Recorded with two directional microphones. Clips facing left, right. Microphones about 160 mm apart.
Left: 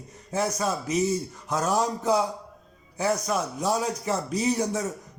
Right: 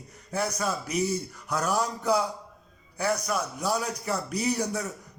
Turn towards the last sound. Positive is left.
turn(degrees=25)  # may be behind; listen again after turning